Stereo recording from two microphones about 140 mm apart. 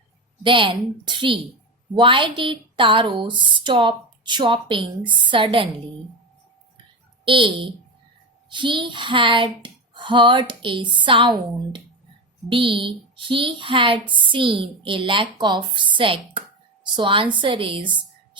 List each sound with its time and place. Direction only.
0.4 s speech: 40° right (ahead or behind)
7.3 s a woman's voice: 40° right (ahead or behind)